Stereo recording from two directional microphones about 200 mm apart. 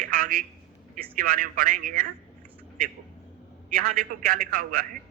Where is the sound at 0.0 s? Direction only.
45° right (ahead or behind).